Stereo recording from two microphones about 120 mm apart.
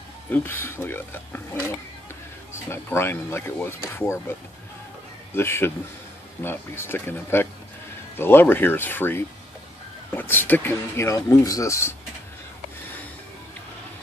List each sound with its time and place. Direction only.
0.3 s speech: 20° left (ahead or behind)